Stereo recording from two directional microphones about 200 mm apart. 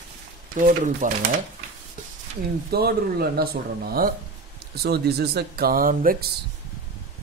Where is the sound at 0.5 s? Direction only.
40° right (ahead or behind).